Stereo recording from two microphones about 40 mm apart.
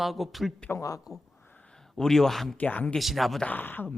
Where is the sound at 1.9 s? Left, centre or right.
Centre.